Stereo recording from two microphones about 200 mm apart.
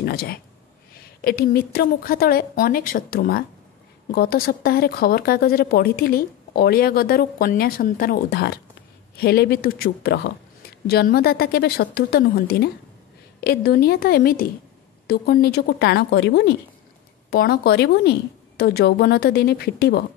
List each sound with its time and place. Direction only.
0.0 s a woman's voice: 50° left (ahead or behind)
17.3 s speech: 50° left (ahead or behind)